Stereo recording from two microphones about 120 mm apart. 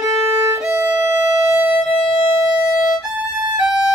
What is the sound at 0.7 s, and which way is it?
Music, 20° right (ahead or behind).